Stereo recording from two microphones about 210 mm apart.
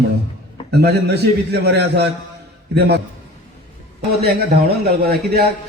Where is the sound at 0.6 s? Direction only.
50° right (ahead or behind).